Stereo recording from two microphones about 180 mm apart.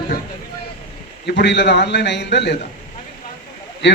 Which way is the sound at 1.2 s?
75° left (ahead or behind).